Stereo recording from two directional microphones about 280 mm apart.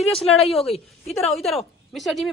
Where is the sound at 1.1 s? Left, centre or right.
Centre.